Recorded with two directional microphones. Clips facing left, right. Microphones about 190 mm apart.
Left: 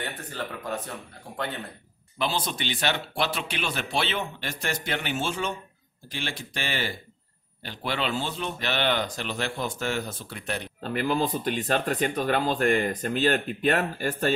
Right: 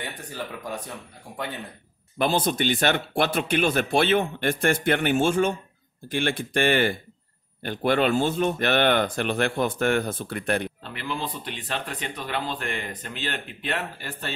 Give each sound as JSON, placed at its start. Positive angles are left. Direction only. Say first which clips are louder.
{"t": 0.0, "sound": "speech", "louder": "even", "side_deg": -10}
{"t": 2.1, "sound": "speech", "louder": "right 6 dB", "side_deg": -50}
{"t": 10.8, "sound": "speech", "louder": "left 6 dB", "side_deg": 45}